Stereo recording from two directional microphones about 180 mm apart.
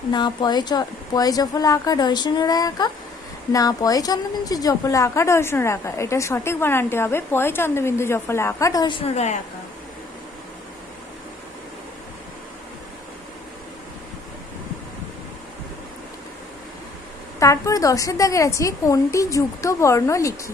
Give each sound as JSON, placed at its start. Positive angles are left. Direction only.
{"t": 0.1, "sound": "a woman's voice", "side_deg": 25}
{"t": 17.4, "sound": "a woman's voice", "side_deg": 15}